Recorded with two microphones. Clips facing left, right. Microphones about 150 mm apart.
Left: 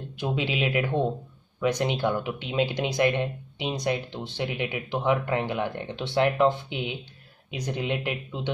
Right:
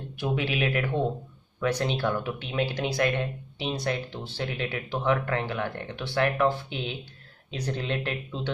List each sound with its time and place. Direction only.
0.1 s speech: 20° left (ahead or behind)